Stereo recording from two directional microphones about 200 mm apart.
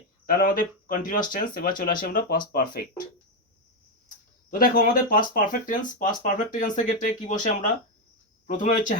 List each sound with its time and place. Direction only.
0.3 s speech: 45° left (ahead or behind)
4.5 s speech: 45° left (ahead or behind)